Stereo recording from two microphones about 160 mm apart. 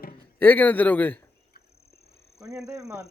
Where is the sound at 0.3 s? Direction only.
10° left (ahead or behind).